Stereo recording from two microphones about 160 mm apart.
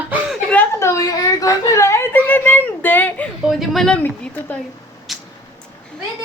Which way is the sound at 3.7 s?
5° left (ahead or behind).